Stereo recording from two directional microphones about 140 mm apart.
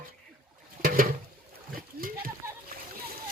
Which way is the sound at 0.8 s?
90° right.